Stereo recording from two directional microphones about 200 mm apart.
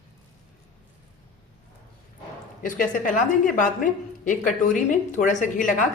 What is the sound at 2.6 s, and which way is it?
A woman's voice, 40° left (ahead or behind).